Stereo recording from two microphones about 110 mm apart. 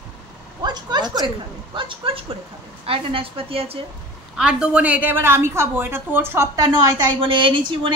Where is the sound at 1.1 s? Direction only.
45° right (ahead or behind).